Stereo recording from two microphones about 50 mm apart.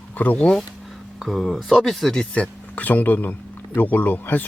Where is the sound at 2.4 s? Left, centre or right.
Left.